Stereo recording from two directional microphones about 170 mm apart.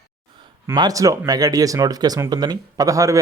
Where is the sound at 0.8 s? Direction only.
20° right (ahead or behind).